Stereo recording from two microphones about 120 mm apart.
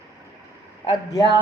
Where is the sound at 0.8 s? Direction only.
35° left (ahead or behind).